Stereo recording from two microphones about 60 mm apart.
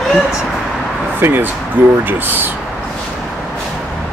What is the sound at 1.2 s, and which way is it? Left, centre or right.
Speech, right.